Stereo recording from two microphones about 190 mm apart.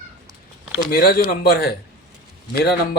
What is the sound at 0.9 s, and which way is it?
A man's voice, 55° left (ahead or behind).